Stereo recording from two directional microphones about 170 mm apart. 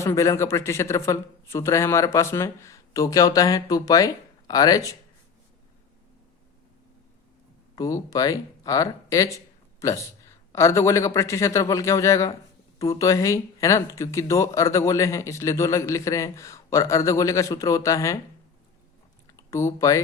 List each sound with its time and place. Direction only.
0.0 s speech: 15° left (ahead or behind)
7.8 s speech: 20° left (ahead or behind)
19.4 s speech: 15° left (ahead or behind)